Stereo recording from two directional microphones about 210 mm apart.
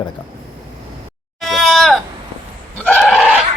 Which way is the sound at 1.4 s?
Centre (ahead or behind).